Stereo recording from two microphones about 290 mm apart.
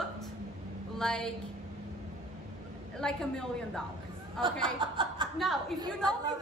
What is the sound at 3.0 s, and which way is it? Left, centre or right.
A woman's voice, centre.